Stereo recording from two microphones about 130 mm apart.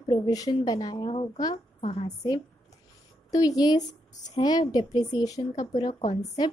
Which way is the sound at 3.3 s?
30° left (ahead or behind).